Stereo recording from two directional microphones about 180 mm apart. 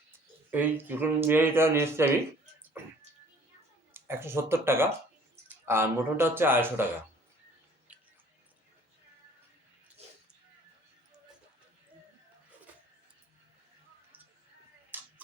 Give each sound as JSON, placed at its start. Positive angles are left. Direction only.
{"t": 0.5, "sound": "speech", "side_deg": -10}
{"t": 3.9, "sound": "speech", "side_deg": -15}
{"t": 7.9, "sound": "music", "side_deg": -5}
{"t": 14.9, "sound": "a sound", "side_deg": -10}